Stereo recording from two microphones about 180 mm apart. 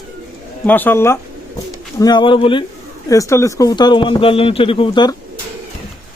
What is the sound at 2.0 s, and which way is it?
Speech, 25° left (ahead or behind).